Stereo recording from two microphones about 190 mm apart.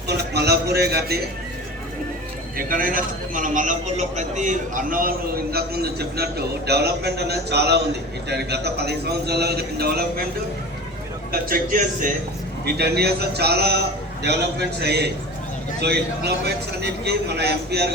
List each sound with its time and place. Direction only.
0.1 s a sound: 60° right (ahead or behind)
2.6 s a man's voice: 50° right (ahead or behind)
11.3 s a man's voice: 50° right (ahead or behind)
12.6 s a man's voice: 60° right (ahead or behind)